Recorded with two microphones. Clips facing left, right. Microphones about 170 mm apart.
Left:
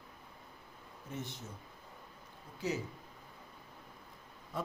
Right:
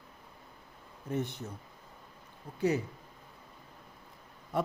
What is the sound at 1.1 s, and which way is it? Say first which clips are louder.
Speech: right 9 dB; 60° right (ahead or behind).